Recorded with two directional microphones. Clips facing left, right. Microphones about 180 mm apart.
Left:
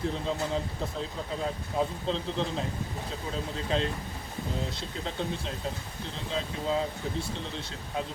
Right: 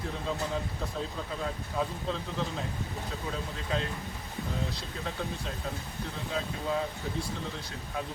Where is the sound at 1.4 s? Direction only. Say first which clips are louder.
Left 3 dB; 25° left (ahead or behind).